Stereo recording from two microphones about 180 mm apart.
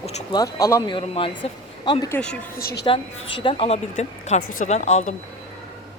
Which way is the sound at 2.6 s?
60° left (ahead or behind).